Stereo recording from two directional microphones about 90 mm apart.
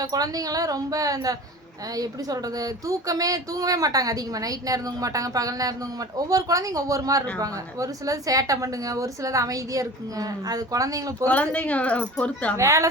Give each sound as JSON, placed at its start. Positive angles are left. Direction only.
{"t": 0.0, "sound": "a woman's voice", "side_deg": -45}
{"t": 11.5, "sound": "a woman's voice", "side_deg": 15}
{"t": 12.5, "sound": "speech", "side_deg": -35}